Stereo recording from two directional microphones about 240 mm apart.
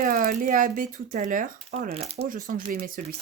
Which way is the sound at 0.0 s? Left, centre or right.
Right.